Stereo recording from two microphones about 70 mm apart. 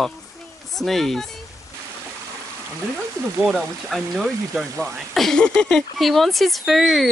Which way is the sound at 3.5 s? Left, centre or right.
Centre.